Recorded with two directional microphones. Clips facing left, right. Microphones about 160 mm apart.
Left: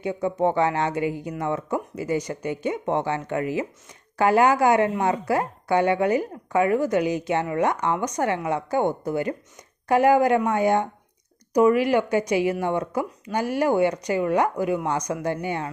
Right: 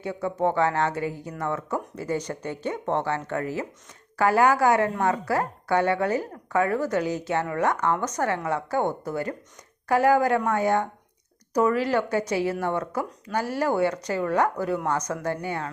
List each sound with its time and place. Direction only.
0.0 s a woman's voice: 15° left (ahead or behind)